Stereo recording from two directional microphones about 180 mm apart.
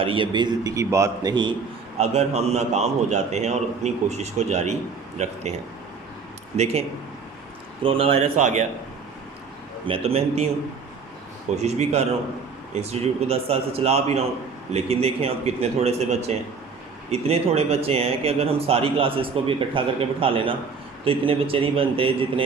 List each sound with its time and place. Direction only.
0.0 s a man's voice: 30° right (ahead or behind)
2.0 s speech: 35° right (ahead or behind)
6.6 s speech: 35° right (ahead or behind)
9.8 s speech: 30° right (ahead or behind)
11.5 s speech: 35° right (ahead or behind)